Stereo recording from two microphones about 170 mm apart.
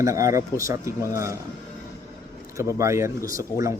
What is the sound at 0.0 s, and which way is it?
Speech, 20° right (ahead or behind).